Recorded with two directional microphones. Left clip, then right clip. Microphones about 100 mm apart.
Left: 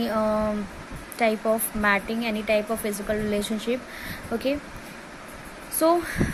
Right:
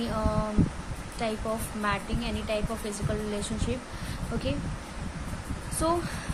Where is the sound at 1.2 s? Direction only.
80° left.